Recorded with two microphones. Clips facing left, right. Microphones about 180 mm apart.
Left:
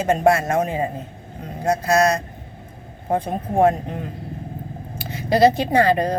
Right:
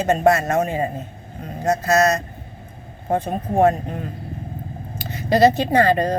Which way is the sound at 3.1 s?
10° left (ahead or behind).